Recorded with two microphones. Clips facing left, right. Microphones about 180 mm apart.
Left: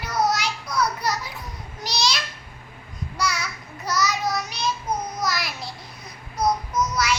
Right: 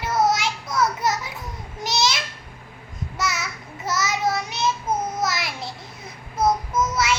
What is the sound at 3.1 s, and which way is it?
Child singing, 25° right (ahead or behind).